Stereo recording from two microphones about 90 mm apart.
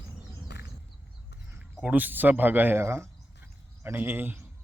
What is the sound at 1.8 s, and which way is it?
Speech, 20° right (ahead or behind).